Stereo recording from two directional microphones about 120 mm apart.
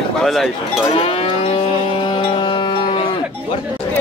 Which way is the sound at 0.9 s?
50° left (ahead or behind).